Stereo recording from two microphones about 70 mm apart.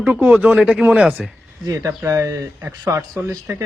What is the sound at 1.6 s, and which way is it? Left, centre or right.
Speech, right.